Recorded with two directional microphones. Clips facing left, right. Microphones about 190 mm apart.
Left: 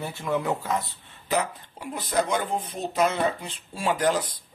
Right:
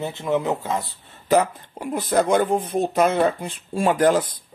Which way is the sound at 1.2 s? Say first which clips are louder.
Right 8 dB; 50° right (ahead or behind).